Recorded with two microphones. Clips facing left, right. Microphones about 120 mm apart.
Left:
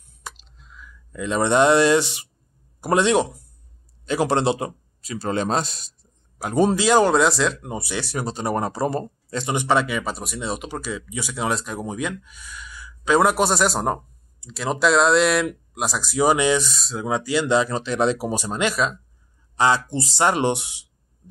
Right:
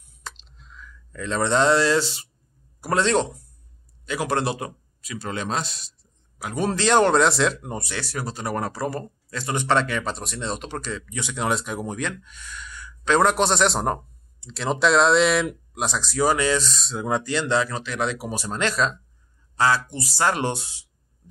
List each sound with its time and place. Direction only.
0.5 s speech: centre (ahead or behind)
4.0 s a man's voice: 30° left (ahead or behind)
6.7 s speech: 5° left (ahead or behind); by 9.6 s 25° left (ahead or behind)
9.6 s speech: 10° left (ahead or behind)
16.8 s speech: centre (ahead or behind); by 17.7 s 15° left (ahead or behind)
17.7 s speech: 25° left (ahead or behind)
18.5 s speech: 10° left (ahead or behind)
19.5 s speech: 20° left (ahead or behind)